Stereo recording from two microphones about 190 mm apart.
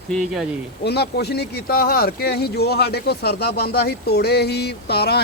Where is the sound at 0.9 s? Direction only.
60° left (ahead or behind).